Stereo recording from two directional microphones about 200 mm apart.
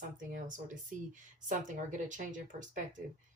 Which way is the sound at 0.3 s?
40° right (ahead or behind).